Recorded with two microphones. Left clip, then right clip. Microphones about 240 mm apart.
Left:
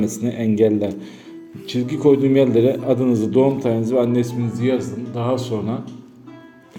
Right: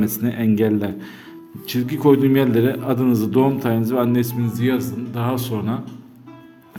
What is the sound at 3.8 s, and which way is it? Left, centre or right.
Speech, right.